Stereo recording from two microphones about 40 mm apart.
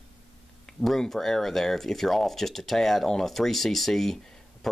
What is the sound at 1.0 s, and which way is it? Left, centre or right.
Speech, centre.